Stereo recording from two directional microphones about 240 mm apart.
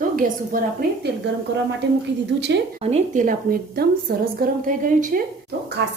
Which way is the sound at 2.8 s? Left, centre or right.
Right.